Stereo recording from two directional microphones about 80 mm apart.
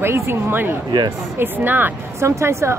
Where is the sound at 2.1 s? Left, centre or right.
Right.